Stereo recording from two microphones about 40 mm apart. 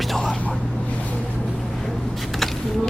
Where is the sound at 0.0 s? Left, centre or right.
Centre.